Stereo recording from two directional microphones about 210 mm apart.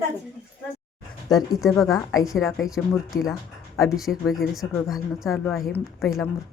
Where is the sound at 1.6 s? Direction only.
Centre (ahead or behind).